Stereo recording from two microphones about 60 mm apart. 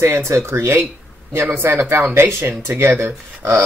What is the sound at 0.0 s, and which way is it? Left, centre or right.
Speech, right.